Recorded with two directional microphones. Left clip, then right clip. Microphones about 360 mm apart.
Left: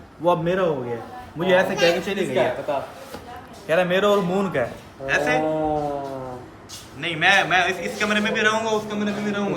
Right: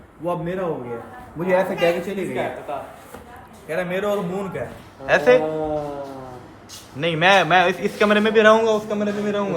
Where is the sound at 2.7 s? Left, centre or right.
Left.